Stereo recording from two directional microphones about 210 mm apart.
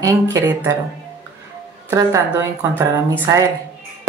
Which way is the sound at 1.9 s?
15° right (ahead or behind).